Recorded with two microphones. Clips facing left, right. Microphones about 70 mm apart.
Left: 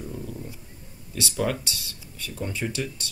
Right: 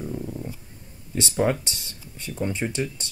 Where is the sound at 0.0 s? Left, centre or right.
Centre.